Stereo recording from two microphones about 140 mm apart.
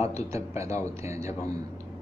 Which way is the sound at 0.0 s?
20° right (ahead or behind).